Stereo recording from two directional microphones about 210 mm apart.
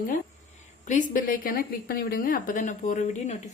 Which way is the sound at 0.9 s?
40° left (ahead or behind).